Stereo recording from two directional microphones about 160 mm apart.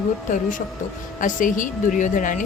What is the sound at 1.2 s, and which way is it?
Speech, 55° left (ahead or behind).